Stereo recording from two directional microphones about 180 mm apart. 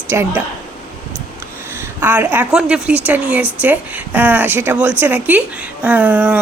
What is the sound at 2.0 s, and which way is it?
A woman's voice, 10° right (ahead or behind).